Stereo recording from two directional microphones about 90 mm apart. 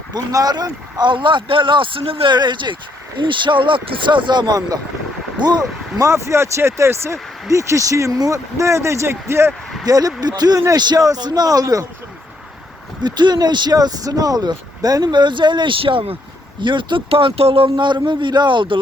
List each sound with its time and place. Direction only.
0.1 s speech: 45° right (ahead or behind); by 2.3 s 85° right
2.3 s speech: 55° right (ahead or behind)
6.1 s speech: 30° right (ahead or behind)
9.8 s a man's voice: 45° right (ahead or behind)
13.0 s speech: 55° right (ahead or behind); by 16.1 s 85° right
16.6 s speech: 60° right (ahead or behind)